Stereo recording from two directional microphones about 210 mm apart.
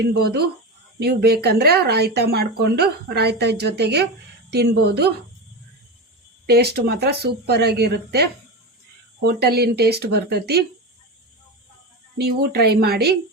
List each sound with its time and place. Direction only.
0.1 s speech: 50° right (ahead or behind)
6.4 s speech: 50° right (ahead or behind)
12.1 s speech: 50° right (ahead or behind)